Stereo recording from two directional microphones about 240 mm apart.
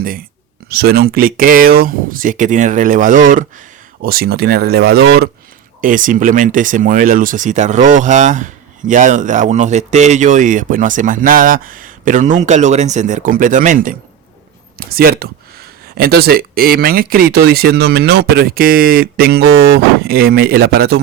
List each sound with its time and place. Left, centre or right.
0.7 s speech: right